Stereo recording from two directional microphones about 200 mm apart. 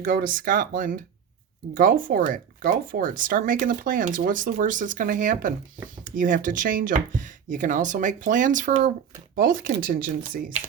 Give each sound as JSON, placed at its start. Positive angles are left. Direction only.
{"t": 0.0, "sound": "speech", "side_deg": -45}